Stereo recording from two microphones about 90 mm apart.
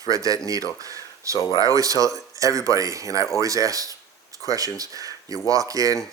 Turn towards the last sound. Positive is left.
turn(degrees=-40)  # may be behind; listen again after turning